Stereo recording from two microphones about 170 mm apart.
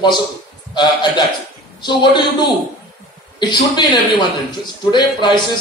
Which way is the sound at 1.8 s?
25° left (ahead or behind).